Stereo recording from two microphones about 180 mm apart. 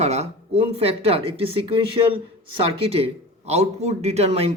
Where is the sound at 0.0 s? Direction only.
35° right (ahead or behind).